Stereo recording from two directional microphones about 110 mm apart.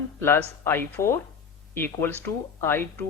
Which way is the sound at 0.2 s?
20° left (ahead or behind).